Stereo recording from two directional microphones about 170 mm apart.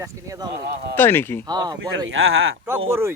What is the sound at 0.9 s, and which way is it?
Speech, 15° left (ahead or behind).